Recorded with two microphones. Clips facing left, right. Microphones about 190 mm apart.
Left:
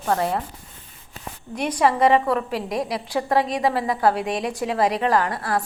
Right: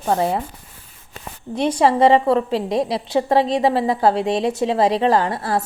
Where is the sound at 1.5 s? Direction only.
25° right (ahead or behind).